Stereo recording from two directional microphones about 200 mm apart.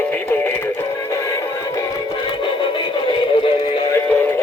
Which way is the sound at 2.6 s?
25° left (ahead or behind).